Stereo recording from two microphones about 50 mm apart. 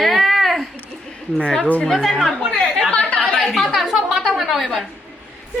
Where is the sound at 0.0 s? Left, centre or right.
Centre.